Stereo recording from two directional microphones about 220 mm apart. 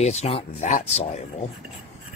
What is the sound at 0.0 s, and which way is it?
Speech, 30° left (ahead or behind).